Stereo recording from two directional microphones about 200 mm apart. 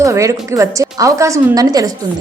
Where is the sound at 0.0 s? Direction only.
15° right (ahead or behind).